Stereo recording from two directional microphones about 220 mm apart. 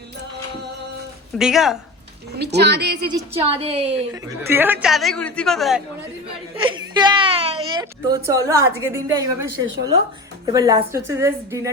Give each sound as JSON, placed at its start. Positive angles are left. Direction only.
{"t": 1.4, "sound": "a man's voice", "side_deg": 0}
{"t": 2.4, "sound": "a woman's voice", "side_deg": -50}
{"t": 3.1, "sound": "a woman's voice", "side_deg": -25}
{"t": 4.1, "sound": "a man's voice", "side_deg": -10}
{"t": 6.6, "sound": "a woman's voice", "side_deg": -20}